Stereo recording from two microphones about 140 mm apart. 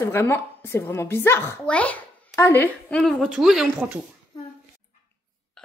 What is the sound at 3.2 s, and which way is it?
Speech, 5° right (ahead or behind).